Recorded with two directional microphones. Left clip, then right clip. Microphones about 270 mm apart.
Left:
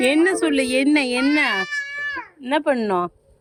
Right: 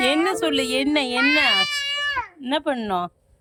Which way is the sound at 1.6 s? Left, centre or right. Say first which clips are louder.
Right 2 dB; right.